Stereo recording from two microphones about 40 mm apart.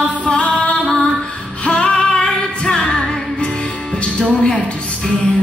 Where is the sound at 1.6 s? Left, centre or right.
Left.